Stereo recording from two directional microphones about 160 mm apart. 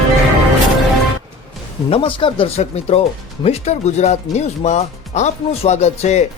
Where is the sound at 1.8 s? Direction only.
35° left (ahead or behind).